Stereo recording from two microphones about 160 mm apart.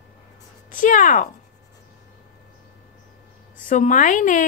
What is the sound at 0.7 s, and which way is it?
Speech, 55° left (ahead or behind).